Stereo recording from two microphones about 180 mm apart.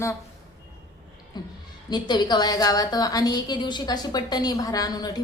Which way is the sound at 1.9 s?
25° left (ahead or behind).